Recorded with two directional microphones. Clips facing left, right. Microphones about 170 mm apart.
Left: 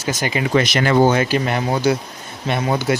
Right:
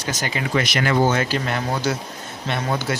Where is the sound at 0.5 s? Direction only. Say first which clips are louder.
Left 4 dB; 25° left (ahead or behind).